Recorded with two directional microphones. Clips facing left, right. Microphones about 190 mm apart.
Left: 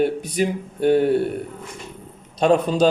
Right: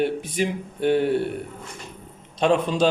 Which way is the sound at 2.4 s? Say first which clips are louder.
Left 3 dB; 40° left (ahead or behind).